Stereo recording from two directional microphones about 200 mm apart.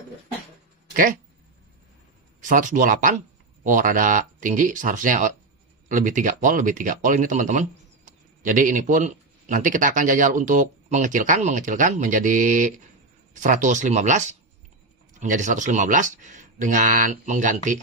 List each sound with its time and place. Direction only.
2.4 s speech: 40° right (ahead or behind)